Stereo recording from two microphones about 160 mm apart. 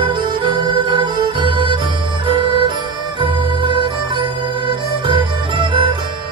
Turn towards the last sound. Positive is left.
turn(degrees=-30)  # may be behind; listen again after turning